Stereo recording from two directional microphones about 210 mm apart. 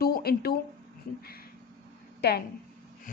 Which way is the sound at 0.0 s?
45° left (ahead or behind).